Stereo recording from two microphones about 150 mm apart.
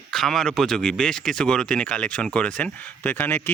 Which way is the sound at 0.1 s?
Centre (ahead or behind).